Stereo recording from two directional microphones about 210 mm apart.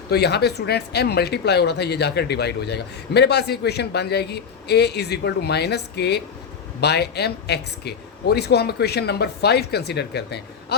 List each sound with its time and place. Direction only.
0.1 s speech: 50° left (ahead or behind)